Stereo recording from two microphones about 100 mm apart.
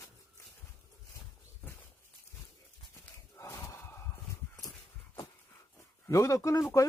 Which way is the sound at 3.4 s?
30° left (ahead or behind).